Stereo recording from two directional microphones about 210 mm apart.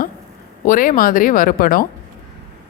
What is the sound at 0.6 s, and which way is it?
Speech, 40° left (ahead or behind).